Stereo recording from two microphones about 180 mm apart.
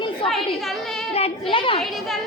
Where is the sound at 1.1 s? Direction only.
30° left (ahead or behind).